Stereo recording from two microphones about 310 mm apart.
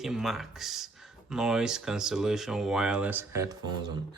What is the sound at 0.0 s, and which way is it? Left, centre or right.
Speech, centre.